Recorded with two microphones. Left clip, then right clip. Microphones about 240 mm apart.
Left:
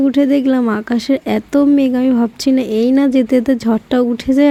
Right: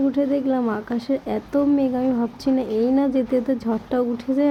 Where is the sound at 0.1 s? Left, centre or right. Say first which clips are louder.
Left 8 dB; left.